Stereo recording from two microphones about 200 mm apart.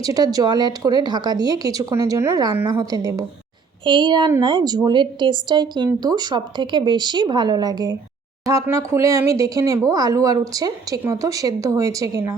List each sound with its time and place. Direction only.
0.0 s speech: 20° right (ahead or behind)